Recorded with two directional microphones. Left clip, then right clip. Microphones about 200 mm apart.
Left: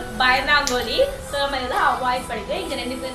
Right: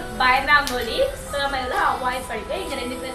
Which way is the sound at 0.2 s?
15° left (ahead or behind).